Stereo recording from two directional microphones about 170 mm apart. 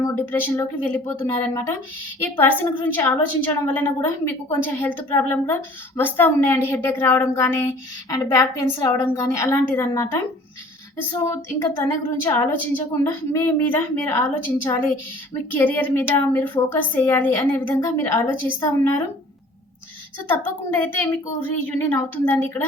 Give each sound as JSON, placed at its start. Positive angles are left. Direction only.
{"t": 0.0, "sound": "a woman's voice", "side_deg": 15}
{"t": 20.3, "sound": "a woman's voice", "side_deg": 10}